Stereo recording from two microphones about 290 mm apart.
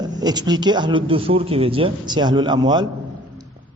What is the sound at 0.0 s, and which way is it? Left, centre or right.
A man's voice, centre.